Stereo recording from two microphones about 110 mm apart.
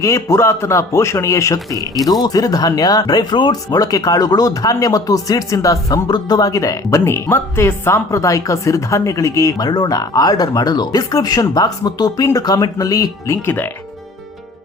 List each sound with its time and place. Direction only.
0.0 s a man's voice: 25° left (ahead or behind)